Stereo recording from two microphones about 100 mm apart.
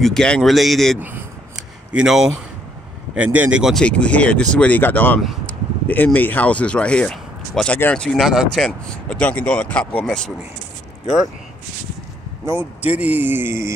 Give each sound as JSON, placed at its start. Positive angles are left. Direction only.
{"t": 0.0, "sound": "speech", "side_deg": 5}
{"t": 3.7, "sound": "speech", "side_deg": 10}
{"t": 5.5, "sound": "a sound", "side_deg": 15}
{"t": 6.1, "sound": "speech", "side_deg": 15}
{"t": 12.4, "sound": "speech", "side_deg": -20}